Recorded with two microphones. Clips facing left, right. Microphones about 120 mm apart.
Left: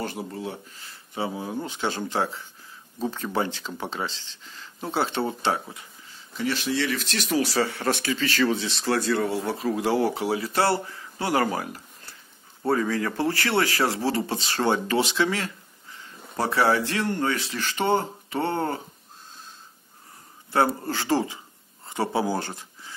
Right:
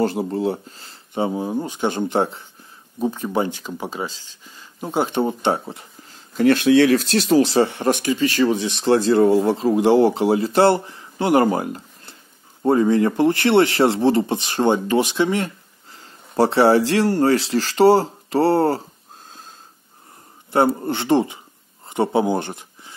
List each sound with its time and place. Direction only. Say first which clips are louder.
0.0 s speech: right 11 dB; 30° right (ahead or behind)
6.3 s speech: right 12 dB; 55° right (ahead or behind)
7.1 s speech: right 9 dB; 35° right (ahead or behind)
16.1 s a sound: right 9 dB; 30° right (ahead or behind)
17.0 s speech: right 9 dB; 35° right (ahead or behind)
20.5 s speech: right 5 dB; 25° right (ahead or behind)